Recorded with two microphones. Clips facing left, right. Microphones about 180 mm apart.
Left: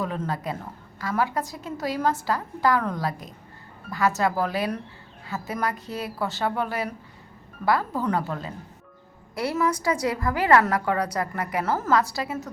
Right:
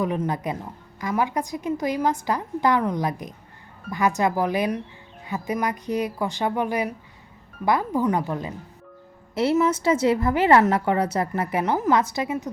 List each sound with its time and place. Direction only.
0.0 s a woman's voice: 15° right (ahead or behind)